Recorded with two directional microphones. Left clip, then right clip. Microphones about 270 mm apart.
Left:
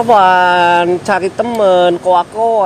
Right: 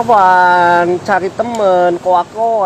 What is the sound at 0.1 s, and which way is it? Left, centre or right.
Speech, left.